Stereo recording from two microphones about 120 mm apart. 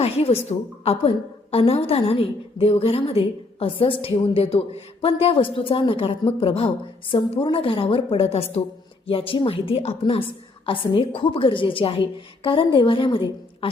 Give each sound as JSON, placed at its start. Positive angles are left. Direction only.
{"t": 0.0, "sound": "a woman's voice", "side_deg": 55}